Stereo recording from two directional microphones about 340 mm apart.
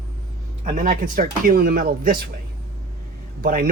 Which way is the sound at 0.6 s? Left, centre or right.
Right.